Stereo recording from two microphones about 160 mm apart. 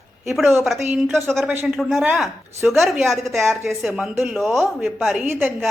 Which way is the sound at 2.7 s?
Centre (ahead or behind).